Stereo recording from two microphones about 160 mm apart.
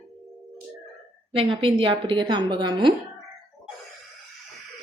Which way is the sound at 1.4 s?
35° right (ahead or behind).